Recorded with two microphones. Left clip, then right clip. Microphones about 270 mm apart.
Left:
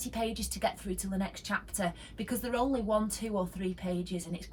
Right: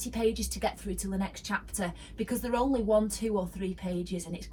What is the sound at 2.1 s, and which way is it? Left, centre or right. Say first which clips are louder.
Speech: right 3 dB; centre.